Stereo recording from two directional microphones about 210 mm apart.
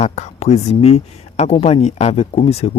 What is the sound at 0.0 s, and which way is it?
Speech, 30° left (ahead or behind).